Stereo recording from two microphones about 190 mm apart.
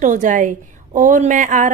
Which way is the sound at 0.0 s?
40° right (ahead or behind).